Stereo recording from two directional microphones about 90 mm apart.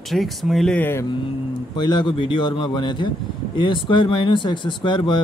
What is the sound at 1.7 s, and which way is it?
Speech, 60° left (ahead or behind).